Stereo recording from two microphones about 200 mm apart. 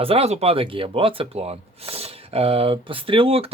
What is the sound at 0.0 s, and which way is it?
Speech, 30° right (ahead or behind).